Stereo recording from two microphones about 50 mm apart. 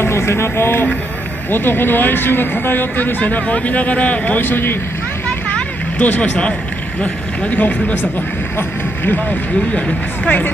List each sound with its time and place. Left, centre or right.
0.0 s speech: left
1.5 s speech: left
4.4 s speech: left
5.5 s vehicle: left
7.0 s speech: left
8.5 s speech: left
9.8 s speech: left